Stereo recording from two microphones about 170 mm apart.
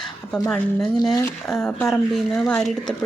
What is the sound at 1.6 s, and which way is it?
A woman's voice, 5° left (ahead or behind).